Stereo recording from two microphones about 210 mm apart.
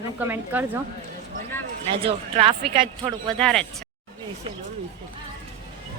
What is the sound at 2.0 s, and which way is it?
Speech, 25° right (ahead or behind).